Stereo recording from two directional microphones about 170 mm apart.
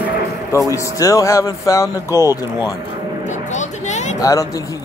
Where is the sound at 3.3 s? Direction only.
45° left (ahead or behind).